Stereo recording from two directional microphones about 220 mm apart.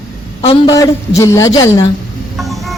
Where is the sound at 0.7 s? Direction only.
15° left (ahead or behind).